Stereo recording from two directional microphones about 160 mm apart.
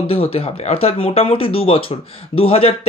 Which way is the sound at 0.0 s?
35° left (ahead or behind).